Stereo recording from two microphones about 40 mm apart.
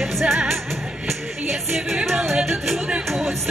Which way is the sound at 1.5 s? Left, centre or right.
Centre.